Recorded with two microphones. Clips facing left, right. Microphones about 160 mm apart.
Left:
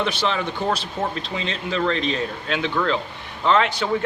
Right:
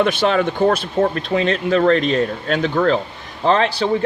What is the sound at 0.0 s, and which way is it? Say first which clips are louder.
A man's voice: right 7 dB; 50° right (ahead or behind).